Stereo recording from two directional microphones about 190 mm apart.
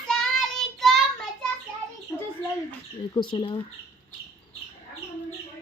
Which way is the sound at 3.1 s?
25° left (ahead or behind).